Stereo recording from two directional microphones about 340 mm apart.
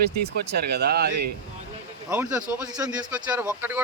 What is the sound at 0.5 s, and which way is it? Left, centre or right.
Speech, right.